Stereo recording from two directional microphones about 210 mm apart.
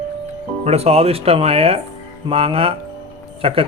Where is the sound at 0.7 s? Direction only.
30° right (ahead or behind).